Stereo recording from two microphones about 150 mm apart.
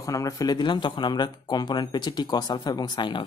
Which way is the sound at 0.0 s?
25° left (ahead or behind).